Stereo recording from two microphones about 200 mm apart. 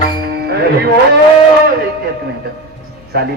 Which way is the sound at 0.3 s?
50° right (ahead or behind).